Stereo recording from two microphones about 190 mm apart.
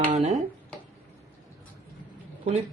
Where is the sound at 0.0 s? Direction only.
30° right (ahead or behind).